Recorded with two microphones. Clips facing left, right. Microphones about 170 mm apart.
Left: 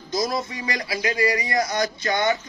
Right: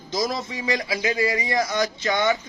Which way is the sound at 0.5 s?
20° right (ahead or behind).